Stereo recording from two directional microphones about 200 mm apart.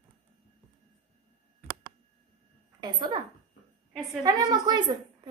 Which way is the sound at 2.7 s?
20° right (ahead or behind).